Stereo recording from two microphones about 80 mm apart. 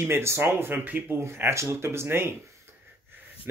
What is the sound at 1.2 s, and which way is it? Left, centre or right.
A man's voice, right.